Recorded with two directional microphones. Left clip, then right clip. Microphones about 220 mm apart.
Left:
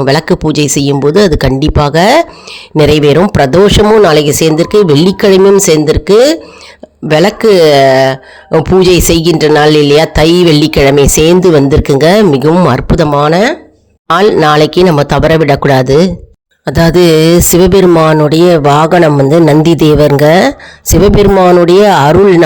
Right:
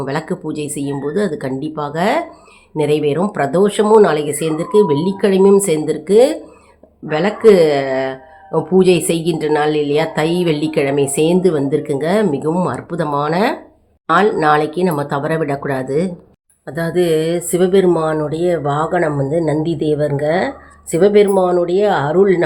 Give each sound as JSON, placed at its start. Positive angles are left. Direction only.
{"t": 0.0, "sound": "speech", "side_deg": 45}
{"t": 14.1, "sound": "speech", "side_deg": 50}